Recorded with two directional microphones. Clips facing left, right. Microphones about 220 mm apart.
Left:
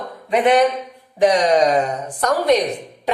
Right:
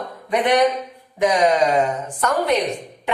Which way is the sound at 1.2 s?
35° left (ahead or behind).